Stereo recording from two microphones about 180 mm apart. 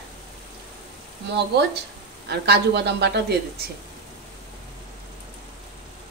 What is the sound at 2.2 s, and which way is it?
A man's voice, 65° right (ahead or behind).